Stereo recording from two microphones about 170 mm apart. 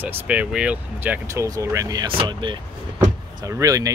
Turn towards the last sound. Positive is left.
turn(degrees=-20)  # may be behind; listen again after turning